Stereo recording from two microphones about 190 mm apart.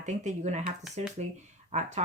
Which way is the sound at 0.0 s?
40° right (ahead or behind).